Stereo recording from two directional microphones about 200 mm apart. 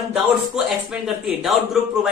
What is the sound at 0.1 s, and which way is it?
Speech, centre (ahead or behind).